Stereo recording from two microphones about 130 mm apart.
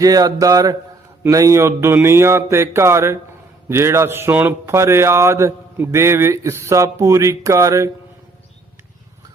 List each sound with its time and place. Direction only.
0.0 s a man's voice: 25° right (ahead or behind)